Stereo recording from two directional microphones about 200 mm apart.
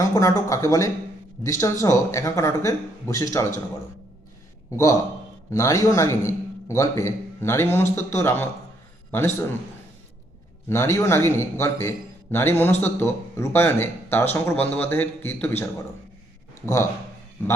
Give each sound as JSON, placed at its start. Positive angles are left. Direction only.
{"t": 0.0, "sound": "speech", "side_deg": 15}
{"t": 5.5, "sound": "a man's voice", "side_deg": 15}
{"t": 10.7, "sound": "speech", "side_deg": 15}